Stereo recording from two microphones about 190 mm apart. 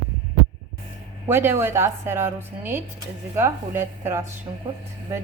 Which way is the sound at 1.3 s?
10° right (ahead or behind).